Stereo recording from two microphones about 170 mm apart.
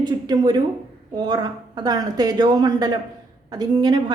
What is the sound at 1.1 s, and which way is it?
A woman's voice, 25° right (ahead or behind).